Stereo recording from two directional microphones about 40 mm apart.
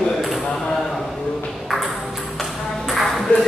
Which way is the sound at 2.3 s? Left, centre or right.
Centre.